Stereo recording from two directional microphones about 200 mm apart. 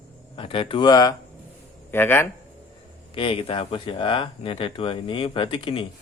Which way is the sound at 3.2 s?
25° left (ahead or behind).